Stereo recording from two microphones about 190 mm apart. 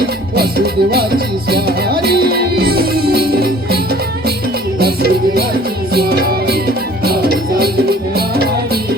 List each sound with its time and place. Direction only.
0.3 s music: 55° right (ahead or behind)
4.8 s music: 55° right (ahead or behind)